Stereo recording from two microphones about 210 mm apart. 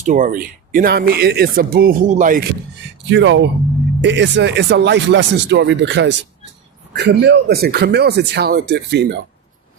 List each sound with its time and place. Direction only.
0.0 s speech: 35° right (ahead or behind)
3.1 s speech: 60° right (ahead or behind)